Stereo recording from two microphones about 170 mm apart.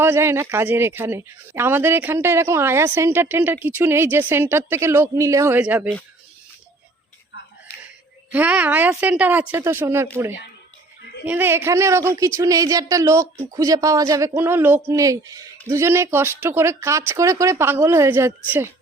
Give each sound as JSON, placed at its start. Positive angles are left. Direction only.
{"t": 0.0, "sound": "speech", "side_deg": -15}
{"t": 8.3, "sound": "speech", "side_deg": -10}
{"t": 11.3, "sound": "speech", "side_deg": -15}